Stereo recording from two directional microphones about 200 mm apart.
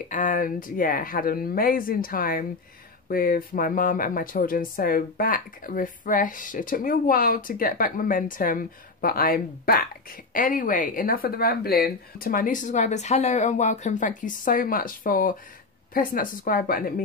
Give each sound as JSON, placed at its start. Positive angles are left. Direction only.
{"t": 0.1, "sound": "speech", "side_deg": 40}